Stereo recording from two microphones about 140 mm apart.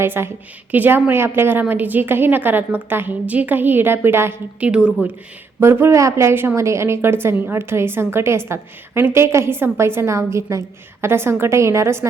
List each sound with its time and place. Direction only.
0.0 s a woman's voice: 15° right (ahead or behind)
5.5 s a woman's voice: 20° right (ahead or behind)